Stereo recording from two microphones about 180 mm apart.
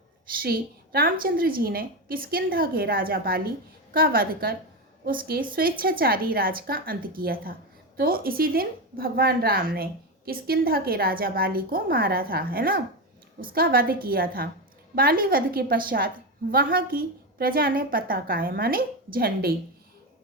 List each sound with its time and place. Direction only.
0.4 s a woman's voice: 55° right (ahead or behind)